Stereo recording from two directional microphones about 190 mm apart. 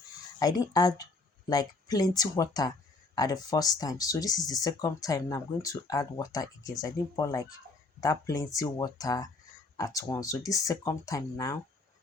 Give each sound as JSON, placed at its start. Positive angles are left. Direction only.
{"t": 0.3, "sound": "speech", "side_deg": 20}